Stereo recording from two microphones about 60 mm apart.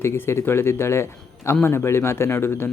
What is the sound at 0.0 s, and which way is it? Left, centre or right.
Speech, left.